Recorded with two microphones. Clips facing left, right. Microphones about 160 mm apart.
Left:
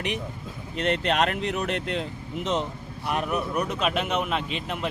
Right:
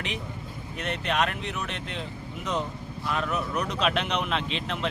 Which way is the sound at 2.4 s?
20° left (ahead or behind).